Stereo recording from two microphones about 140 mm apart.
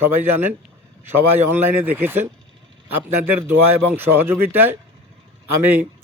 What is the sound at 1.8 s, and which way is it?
Speech, 15° right (ahead or behind).